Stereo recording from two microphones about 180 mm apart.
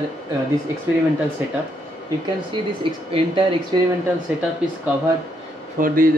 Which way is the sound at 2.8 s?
30° right (ahead or behind).